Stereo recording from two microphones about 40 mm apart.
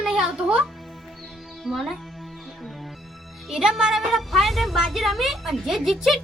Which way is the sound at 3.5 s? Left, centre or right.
Centre.